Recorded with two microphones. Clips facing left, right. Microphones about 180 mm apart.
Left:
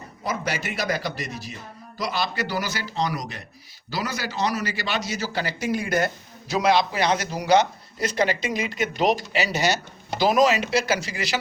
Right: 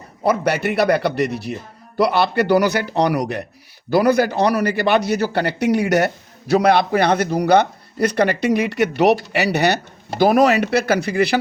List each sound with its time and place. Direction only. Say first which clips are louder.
0.2 s a man's voice: right 10 dB; 60° right (ahead or behind)
6.5 s a man's voice: right 6 dB; 60° right (ahead or behind)